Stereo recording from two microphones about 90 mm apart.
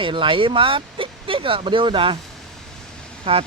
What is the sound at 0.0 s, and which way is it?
Speech, 70° right (ahead or behind).